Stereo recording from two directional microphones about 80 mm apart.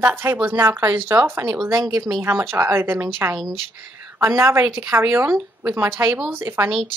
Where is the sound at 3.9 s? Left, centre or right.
Right.